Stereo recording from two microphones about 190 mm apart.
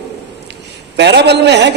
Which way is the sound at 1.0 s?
60° right (ahead or behind).